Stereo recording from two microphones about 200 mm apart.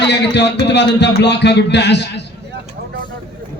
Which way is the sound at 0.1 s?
60° left (ahead or behind).